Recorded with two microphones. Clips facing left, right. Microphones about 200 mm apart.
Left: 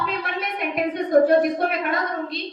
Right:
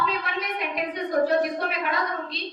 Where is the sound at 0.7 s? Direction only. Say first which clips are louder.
Left 7 dB; 50° left (ahead or behind).